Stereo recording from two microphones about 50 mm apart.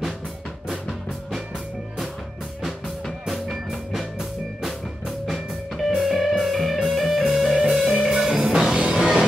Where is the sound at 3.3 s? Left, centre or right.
Centre.